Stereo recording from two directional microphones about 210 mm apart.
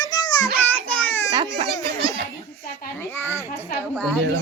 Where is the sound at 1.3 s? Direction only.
20° right (ahead or behind).